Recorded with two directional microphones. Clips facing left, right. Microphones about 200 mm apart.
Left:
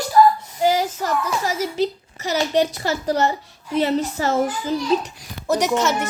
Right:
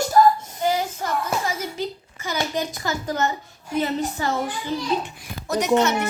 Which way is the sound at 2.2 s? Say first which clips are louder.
Left 6 dB; 40° left (ahead or behind).